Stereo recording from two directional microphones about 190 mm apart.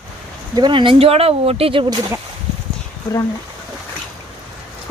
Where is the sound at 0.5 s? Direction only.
25° right (ahead or behind).